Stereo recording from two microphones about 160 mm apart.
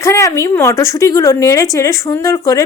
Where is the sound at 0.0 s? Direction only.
20° left (ahead or behind).